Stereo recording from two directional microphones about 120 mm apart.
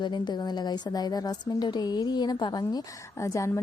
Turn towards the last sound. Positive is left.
turn(degrees=25)  # may be behind; listen again after turning